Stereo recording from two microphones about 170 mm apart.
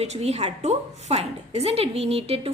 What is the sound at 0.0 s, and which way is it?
A woman's voice, 40° right (ahead or behind).